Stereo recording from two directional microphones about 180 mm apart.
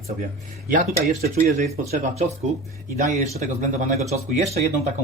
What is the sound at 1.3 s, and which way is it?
Speech, 40° right (ahead or behind).